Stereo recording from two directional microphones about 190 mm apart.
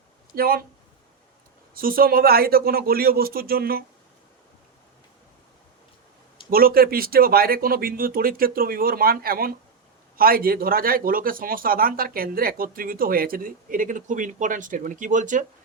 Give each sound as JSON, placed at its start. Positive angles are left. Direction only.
{"t": 0.3, "sound": "speech", "side_deg": -50}
{"t": 1.7, "sound": "speech", "side_deg": -50}
{"t": 6.5, "sound": "speech", "side_deg": -50}